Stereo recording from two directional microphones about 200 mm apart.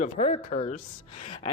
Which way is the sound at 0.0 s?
35° left (ahead or behind).